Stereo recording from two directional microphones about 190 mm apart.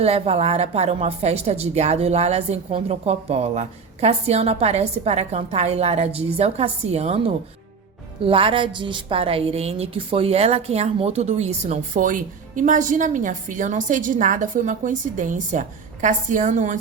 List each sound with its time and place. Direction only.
0.0 s a woman's voice: 30° right (ahead or behind)